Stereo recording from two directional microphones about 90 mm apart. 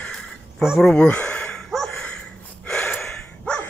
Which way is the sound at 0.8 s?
10° left (ahead or behind).